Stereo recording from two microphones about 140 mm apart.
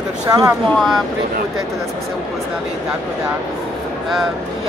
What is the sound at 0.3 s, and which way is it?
Speech, 25° right (ahead or behind).